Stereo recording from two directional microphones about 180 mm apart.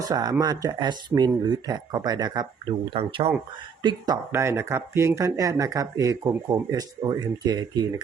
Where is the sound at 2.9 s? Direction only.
35° right (ahead or behind).